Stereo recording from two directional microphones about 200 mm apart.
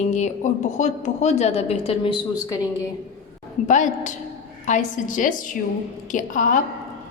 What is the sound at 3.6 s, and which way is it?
A woman's voice, 40° left (ahead or behind).